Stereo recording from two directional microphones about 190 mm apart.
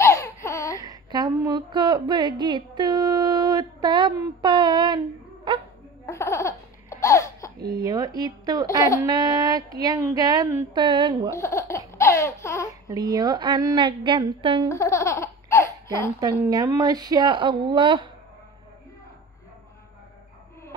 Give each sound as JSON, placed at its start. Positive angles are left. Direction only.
{"t": 0.0, "sound": "laughter", "side_deg": 15}
{"t": 0.7, "sound": "a woman's voice", "side_deg": -20}
{"t": 6.0, "sound": "baby laughter", "side_deg": 15}
{"t": 7.5, "sound": "speech", "side_deg": -20}
{"t": 11.3, "sound": "speech", "side_deg": 15}
{"t": 12.0, "sound": "a sound", "side_deg": 15}
{"t": 12.8, "sound": "speech", "side_deg": -20}
{"t": 14.7, "sound": "baby laughter", "side_deg": 15}
{"t": 16.2, "sound": "speech", "side_deg": -20}